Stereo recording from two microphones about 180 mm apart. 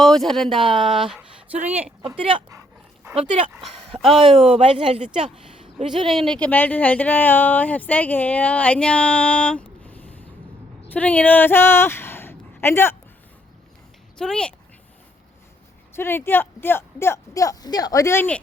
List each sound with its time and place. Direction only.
0.0 s speech: centre (ahead or behind)
1.8 s speech: 25° right (ahead or behind)
3.0 s dog: 15° right (ahead or behind)
4.1 s speech: 30° right (ahead or behind)
6.1 s speech: centre (ahead or behind)
14.2 s speech: 5° left (ahead or behind)
16.0 s speech: 15° left (ahead or behind)